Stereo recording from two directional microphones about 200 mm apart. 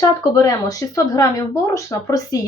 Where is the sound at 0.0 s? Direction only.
15° left (ahead or behind).